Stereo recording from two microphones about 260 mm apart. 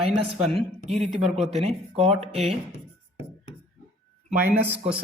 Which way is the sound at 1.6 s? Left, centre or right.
Right.